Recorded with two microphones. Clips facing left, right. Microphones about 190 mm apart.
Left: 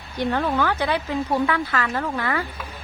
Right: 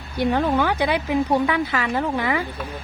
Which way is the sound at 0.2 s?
15° right (ahead or behind).